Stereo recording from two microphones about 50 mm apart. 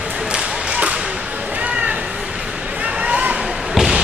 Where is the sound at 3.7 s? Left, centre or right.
Centre.